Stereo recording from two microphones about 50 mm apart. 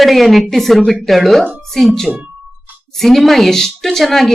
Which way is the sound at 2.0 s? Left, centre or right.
Right.